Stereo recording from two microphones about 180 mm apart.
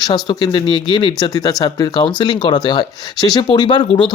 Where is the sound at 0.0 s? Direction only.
25° left (ahead or behind).